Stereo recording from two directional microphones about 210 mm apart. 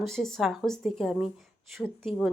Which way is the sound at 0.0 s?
Centre (ahead or behind).